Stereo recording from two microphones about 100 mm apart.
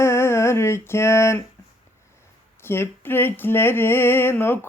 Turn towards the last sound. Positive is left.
turn(degrees=20)  # may be behind; listen again after turning